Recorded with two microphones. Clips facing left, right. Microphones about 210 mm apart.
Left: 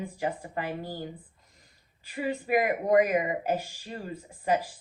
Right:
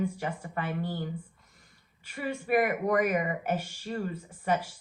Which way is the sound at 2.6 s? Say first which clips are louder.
Left 3 dB; 30° left (ahead or behind).